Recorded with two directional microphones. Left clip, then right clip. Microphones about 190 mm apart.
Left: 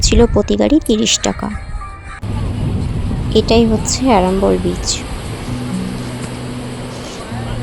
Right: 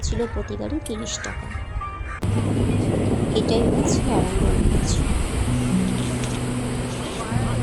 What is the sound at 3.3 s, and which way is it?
Speech, 55° left (ahead or behind).